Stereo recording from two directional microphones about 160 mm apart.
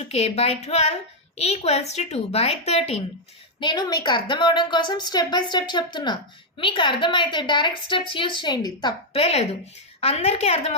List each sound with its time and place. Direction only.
0.1 s a woman's voice: 40° left (ahead or behind)
3.6 s a woman's voice: 25° left (ahead or behind)
9.2 s a woman's voice: 40° left (ahead or behind)